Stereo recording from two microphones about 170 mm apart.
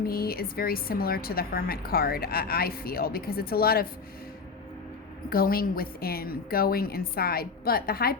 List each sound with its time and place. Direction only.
0.0 s a woman's voice: 60° left (ahead or behind)
5.3 s a woman's voice: 60° left (ahead or behind)